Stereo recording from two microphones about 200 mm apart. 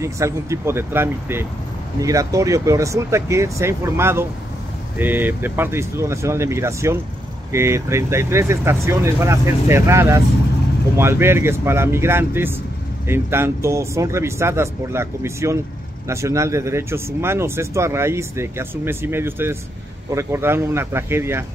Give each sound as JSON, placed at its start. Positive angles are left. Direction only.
{"t": 0.0, "sound": "speech", "side_deg": -15}